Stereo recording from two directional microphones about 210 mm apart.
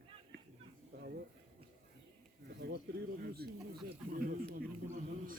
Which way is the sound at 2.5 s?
50° right (ahead or behind).